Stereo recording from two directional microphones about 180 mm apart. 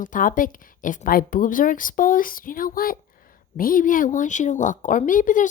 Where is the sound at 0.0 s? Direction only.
50° left (ahead or behind).